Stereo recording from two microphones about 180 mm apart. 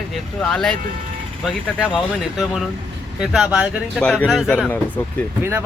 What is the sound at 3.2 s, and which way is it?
Speech, 5° right (ahead or behind).